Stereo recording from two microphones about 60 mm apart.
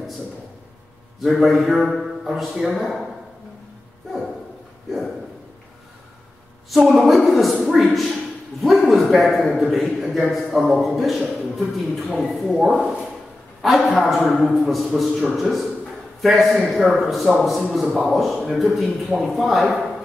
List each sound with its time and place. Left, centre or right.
1.2 s a man's voice: centre
6.7 s a man's voice: centre